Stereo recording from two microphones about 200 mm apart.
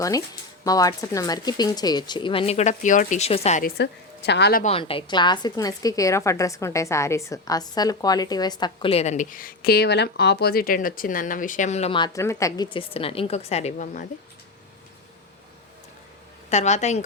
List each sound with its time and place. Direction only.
0.6 s a woman's voice: 15° left (ahead or behind)
3.6 s a woman's voice: 55° left (ahead or behind)
4.6 s a woman's voice: 30° left (ahead or behind)
16.5 s a woman's voice: 35° left (ahead or behind)